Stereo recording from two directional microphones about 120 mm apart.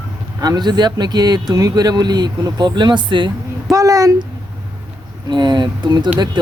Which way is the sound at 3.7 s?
30° right (ahead or behind).